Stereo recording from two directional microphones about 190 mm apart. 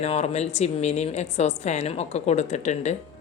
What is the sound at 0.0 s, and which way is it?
Speech, 35° left (ahead or behind).